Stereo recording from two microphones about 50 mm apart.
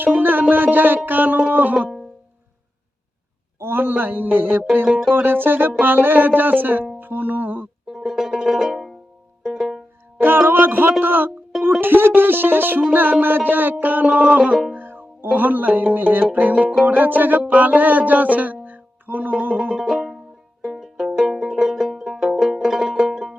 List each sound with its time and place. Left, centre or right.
0.0 s music: right
3.6 s speech: right
5.8 s music: right
7.9 s music: centre
10.2 s speech: right
12.9 s music: right
14.7 s music: right
19.8 s music: centre
21.1 s music: centre
21.3 s music: centre